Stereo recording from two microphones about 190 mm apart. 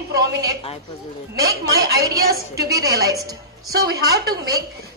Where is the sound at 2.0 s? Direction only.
20° right (ahead or behind).